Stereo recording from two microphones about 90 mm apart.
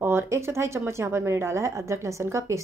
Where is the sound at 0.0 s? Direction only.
25° right (ahead or behind).